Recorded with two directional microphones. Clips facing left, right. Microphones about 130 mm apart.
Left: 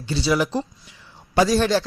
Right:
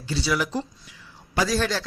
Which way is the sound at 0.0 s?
25° left (ahead or behind).